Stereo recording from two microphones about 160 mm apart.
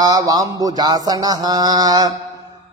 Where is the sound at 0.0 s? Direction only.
20° right (ahead or behind).